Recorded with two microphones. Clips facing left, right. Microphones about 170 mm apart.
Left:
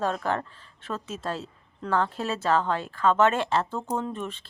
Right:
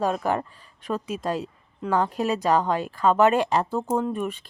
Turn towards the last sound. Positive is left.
turn(degrees=-10)  # may be behind; listen again after turning